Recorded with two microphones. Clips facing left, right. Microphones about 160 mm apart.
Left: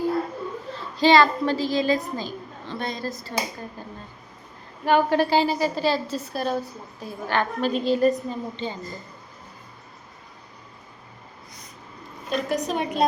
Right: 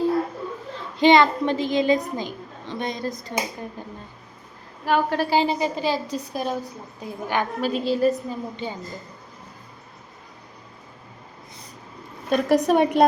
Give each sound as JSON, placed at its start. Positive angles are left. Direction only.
{"t": 0.9, "sound": "a woman's voice", "side_deg": -20}
{"t": 4.9, "sound": "a woman's voice", "side_deg": 0}
{"t": 5.3, "sound": "a woman's voice", "side_deg": -20}
{"t": 7.7, "sound": "a woman's voice", "side_deg": -5}
{"t": 12.3, "sound": "a woman's voice", "side_deg": -60}